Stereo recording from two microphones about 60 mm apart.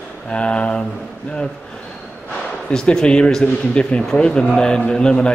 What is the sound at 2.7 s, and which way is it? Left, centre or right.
A man's voice, centre.